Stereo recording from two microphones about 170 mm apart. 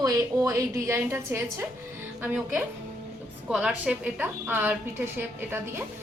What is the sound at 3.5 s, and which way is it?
A woman's voice, 5° right (ahead or behind).